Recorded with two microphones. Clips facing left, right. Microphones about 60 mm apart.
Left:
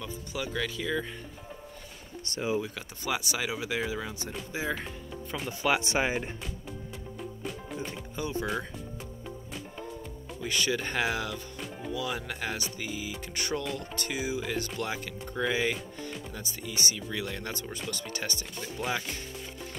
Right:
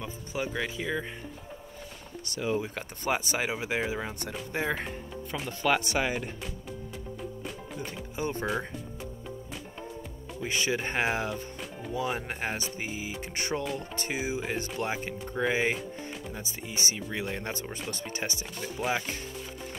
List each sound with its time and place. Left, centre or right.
0.0 s speech: right
3.1 s speech: right
4.2 s speech: right
5.1 s speech: centre
5.8 s speech: centre
7.2 s music: centre
8.2 s speech: right
10.4 s speech: right